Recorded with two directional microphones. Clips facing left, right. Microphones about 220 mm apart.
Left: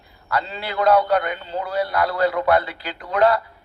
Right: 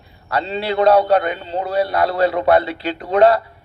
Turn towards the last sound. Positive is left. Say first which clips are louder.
# right 5 dB
turn(degrees=-25)  # may be behind; listen again after turning